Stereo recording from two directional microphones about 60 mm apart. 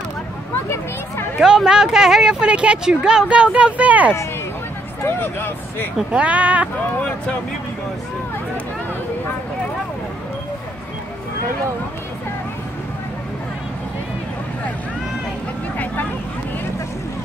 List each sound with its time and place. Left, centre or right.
1.4 s speech: centre
5.0 s speech: left
6.1 s speech: right